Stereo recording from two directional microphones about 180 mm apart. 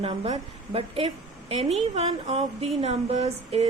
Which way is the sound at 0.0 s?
30° right (ahead or behind).